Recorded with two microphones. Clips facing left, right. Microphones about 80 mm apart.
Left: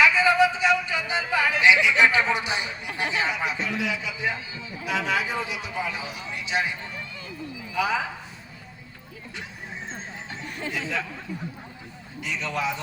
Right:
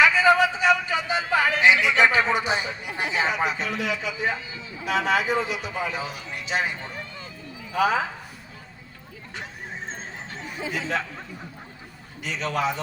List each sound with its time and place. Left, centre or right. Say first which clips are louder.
0.0 s a sound: right 1 dB; right
3.2 s a man's voice: right 2 dB; right
10.5 s speech: right 1 dB; centre
12.3 s a man's voice: right 3 dB; right